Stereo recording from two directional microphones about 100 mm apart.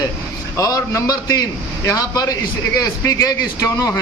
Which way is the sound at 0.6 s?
35° left (ahead or behind).